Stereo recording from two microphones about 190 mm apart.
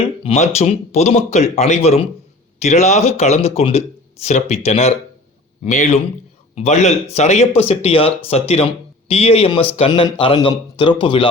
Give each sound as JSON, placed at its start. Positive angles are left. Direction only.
{"t": 0.0, "sound": "speech", "side_deg": 30}